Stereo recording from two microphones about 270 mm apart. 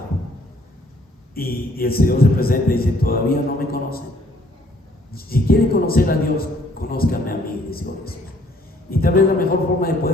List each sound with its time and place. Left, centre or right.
1.4 s a man's voice: left
5.1 s a man's voice: left